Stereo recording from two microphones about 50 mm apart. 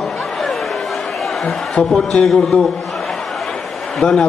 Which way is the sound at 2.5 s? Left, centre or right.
Left.